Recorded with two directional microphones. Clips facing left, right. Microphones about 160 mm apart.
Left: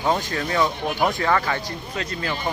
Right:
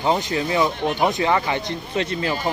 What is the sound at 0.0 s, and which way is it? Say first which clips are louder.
Speech: right 2 dB; 20° right (ahead or behind).